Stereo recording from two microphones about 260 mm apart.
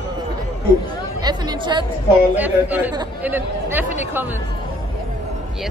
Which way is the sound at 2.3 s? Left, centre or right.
Centre.